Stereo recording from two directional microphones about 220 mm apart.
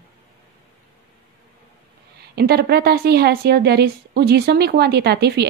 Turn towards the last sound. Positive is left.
turn(degrees=-50)  # may be behind; listen again after turning